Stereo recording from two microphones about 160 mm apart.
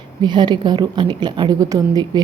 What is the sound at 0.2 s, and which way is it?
A woman's voice, 30° right (ahead or behind).